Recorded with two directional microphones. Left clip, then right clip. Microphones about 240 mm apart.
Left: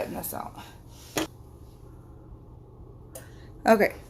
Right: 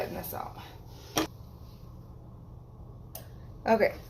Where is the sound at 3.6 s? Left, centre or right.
Left.